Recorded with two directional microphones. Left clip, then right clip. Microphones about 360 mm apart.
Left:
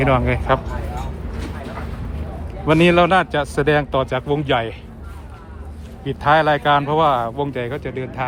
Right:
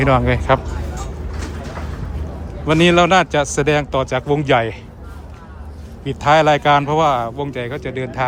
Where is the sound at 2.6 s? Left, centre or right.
Centre.